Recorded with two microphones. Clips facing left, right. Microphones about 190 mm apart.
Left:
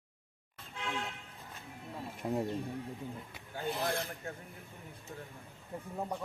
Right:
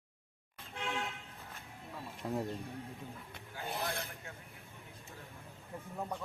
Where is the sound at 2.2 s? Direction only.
20° left (ahead or behind).